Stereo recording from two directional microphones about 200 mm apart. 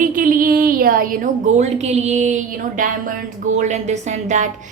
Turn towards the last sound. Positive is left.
turn(degrees=-35)  # may be behind; listen again after turning